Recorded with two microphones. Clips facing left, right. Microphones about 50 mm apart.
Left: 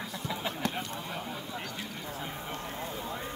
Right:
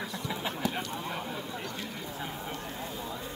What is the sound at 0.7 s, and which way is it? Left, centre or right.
Speech, centre.